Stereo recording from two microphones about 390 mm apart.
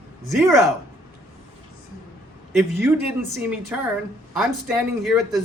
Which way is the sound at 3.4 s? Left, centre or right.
Centre.